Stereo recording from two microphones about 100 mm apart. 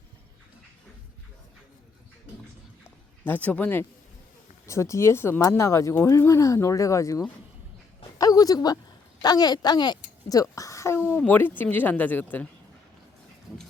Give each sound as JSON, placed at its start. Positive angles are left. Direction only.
{"t": 3.2, "sound": "speech", "side_deg": 15}
{"t": 4.6, "sound": "a woman's voice", "side_deg": 30}